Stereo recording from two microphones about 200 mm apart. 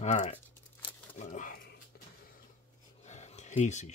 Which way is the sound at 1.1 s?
40° left (ahead or behind).